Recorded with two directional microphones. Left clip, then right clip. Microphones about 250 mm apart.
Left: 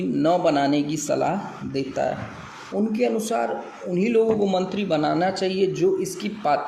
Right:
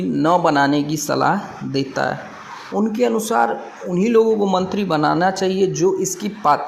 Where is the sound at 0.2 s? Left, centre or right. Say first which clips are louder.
Right 5 dB; centre.